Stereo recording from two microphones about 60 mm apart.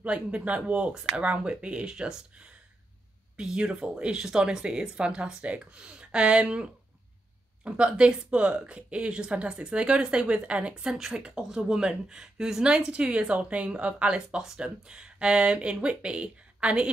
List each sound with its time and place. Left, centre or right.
0.0 s speech: right